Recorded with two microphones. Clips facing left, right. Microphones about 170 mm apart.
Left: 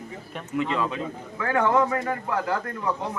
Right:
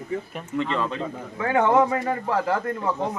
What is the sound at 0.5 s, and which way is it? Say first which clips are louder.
Speech: even; 10° left (ahead or behind).